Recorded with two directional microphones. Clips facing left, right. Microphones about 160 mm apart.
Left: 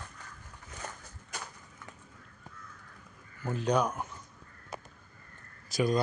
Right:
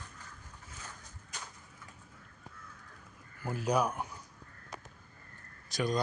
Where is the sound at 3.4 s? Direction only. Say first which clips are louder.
Left 2 dB; 5° right (ahead or behind).